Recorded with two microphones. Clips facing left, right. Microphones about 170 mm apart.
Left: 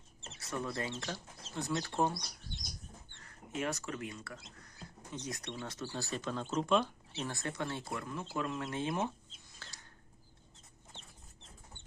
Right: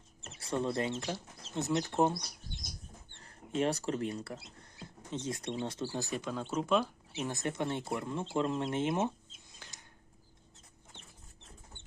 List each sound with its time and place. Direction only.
0.3 s speech: 25° right (ahead or behind)
3.2 s speech: 30° right (ahead or behind)
9.6 s a sound: 15° right (ahead or behind)